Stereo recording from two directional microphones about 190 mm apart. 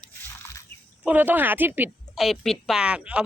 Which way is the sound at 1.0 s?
10° right (ahead or behind).